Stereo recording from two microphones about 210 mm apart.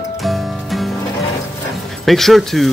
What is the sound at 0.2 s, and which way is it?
Music, centre (ahead or behind).